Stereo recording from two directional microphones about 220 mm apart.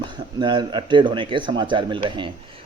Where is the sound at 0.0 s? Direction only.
20° right (ahead or behind).